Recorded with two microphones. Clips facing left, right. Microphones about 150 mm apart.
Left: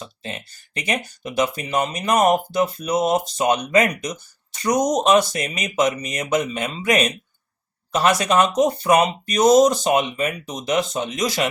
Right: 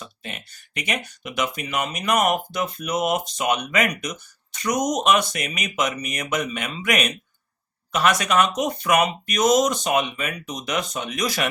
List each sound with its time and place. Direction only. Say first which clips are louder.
0.0 s speech: left 4 dB; 30° left (ahead or behind)
8.2 s speech: left 4 dB; 30° left (ahead or behind)